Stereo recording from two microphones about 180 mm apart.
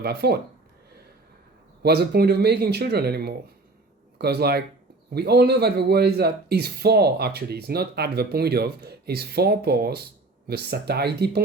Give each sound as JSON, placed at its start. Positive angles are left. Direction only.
{"t": 0.0, "sound": "speech", "side_deg": -60}
{"t": 1.8, "sound": "speech", "side_deg": -65}